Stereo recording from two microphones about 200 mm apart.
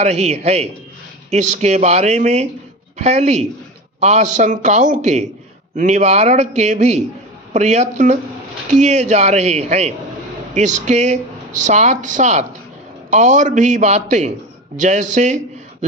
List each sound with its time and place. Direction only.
0.0 s speech: 35° right (ahead or behind)